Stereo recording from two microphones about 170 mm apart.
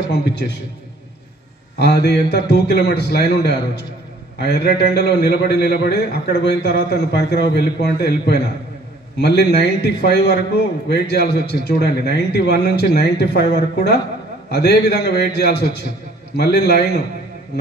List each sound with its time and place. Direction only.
0.1 s a man's voice: 75° left (ahead or behind)
1.8 s a man's voice: 75° left (ahead or behind)